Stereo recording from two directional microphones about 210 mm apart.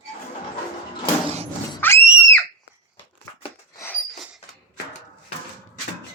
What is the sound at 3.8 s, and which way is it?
Rodents, 10° left (ahead or behind).